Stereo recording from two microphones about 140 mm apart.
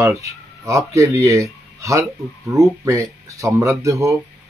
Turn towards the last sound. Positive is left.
turn(degrees=-20)  # may be behind; listen again after turning